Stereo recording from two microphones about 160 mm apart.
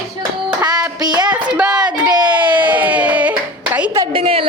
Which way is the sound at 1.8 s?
25° right (ahead or behind).